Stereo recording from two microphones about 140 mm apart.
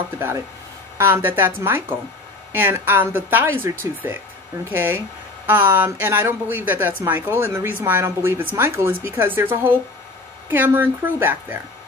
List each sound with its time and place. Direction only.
0.9 s speech: 15° right (ahead or behind)